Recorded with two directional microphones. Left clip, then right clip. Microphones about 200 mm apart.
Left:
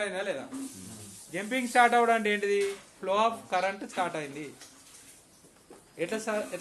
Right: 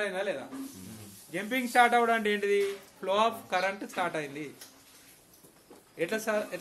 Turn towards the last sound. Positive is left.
turn(degrees=0)  # may be behind; listen again after turning